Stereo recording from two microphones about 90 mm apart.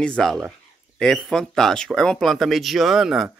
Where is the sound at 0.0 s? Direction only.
10° left (ahead or behind).